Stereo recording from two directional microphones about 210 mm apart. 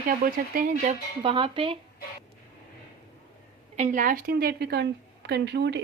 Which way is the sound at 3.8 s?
35° right (ahead or behind).